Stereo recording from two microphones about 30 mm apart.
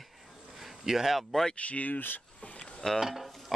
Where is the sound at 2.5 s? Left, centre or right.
Left.